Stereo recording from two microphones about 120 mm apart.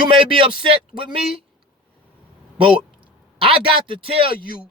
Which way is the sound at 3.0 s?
50° right (ahead or behind).